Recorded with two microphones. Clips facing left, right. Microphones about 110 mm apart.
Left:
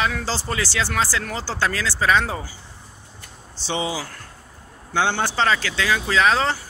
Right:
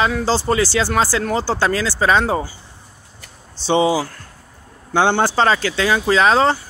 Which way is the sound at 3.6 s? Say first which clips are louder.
Right 10 dB; 30° right (ahead or behind).